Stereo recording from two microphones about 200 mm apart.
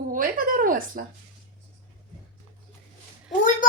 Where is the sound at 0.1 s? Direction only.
45° right (ahead or behind).